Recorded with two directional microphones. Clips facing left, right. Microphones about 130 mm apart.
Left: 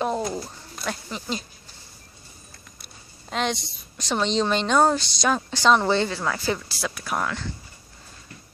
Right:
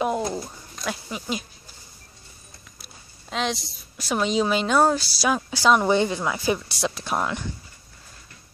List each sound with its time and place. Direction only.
0.3 s bird: 5° right (ahead or behind)
2.8 s a woman's voice: centre (ahead or behind); by 7.4 s 20° right (ahead or behind)